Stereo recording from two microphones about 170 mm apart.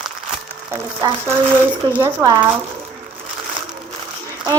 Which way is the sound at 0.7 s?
15° right (ahead or behind).